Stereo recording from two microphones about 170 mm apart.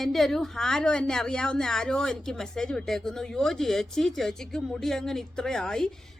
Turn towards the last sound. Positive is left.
turn(degrees=5)  # may be behind; listen again after turning